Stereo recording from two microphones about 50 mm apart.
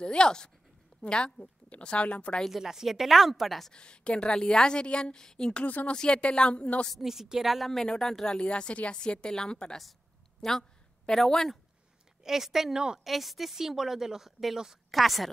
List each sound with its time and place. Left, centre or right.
0.0 s a woman's voice: centre
2.5 s a woman's voice: centre
3.7 s a woman's voice: centre
6.9 s a woman's voice: centre
10.4 s a woman's voice: centre
12.2 s a woman's voice: centre